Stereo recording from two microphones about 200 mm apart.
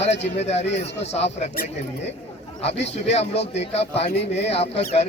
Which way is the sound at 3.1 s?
30° left (ahead or behind).